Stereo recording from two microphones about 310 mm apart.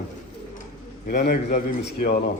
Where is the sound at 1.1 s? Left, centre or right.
Left.